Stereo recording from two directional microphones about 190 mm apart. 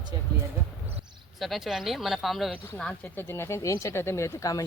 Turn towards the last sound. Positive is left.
turn(degrees=15)  # may be behind; listen again after turning